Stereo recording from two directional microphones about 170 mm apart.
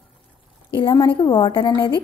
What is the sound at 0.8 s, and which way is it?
A woman's voice, 25° left (ahead or behind).